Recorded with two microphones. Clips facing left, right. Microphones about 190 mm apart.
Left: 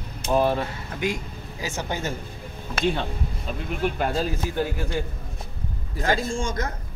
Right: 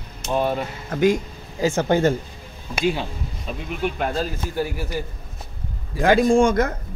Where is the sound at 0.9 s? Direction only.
45° right (ahead or behind).